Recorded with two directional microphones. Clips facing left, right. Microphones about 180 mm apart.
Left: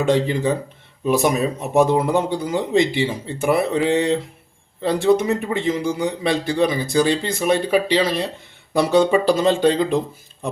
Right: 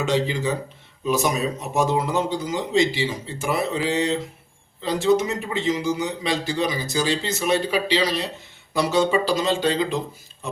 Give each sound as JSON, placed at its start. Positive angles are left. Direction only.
{"t": 0.0, "sound": "speech", "side_deg": 55}